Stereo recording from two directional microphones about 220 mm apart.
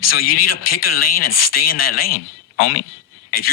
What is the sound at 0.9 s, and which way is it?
Speech, 40° left (ahead or behind).